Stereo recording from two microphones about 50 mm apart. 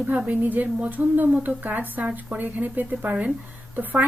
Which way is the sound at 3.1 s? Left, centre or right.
Right.